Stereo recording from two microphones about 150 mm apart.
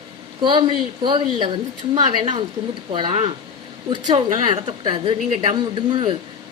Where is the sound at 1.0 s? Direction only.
35° right (ahead or behind).